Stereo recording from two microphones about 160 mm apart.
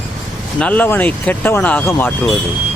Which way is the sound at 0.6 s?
10° left (ahead or behind).